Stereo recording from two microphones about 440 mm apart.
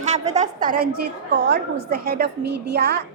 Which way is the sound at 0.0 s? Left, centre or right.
Centre.